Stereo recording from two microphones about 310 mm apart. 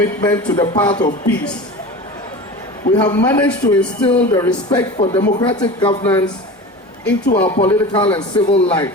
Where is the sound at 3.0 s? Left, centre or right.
Centre.